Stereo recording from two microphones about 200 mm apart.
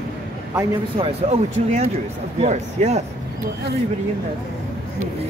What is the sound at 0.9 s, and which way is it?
Speech, 30° right (ahead or behind).